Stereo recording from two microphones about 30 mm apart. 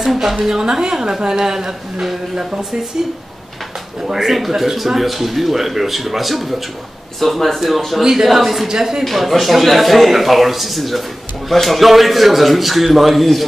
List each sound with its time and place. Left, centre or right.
0.0 s a woman's voice: centre
4.1 s a man's voice: centre
8.0 s speech: centre
9.0 s a man's voice: centre